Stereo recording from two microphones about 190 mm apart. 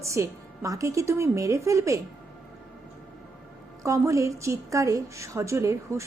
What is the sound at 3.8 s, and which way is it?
A woman's voice, 15° right (ahead or behind).